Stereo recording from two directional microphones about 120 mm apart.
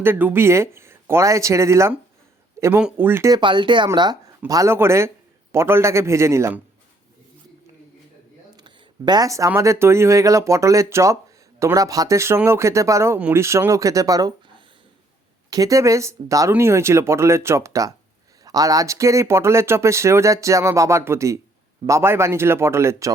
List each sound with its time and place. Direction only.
0.0 s speech: 15° right (ahead or behind)
3.3 s speech: 40° right (ahead or behind); by 6.6 s 25° right (ahead or behind)
8.5 s a sound: 35° right (ahead or behind)
9.5 s speech: 20° right (ahead or behind)
13.1 s speech: 10° right (ahead or behind)
13.4 s speech: 25° right (ahead or behind)
15.4 s speech: 30° right (ahead or behind)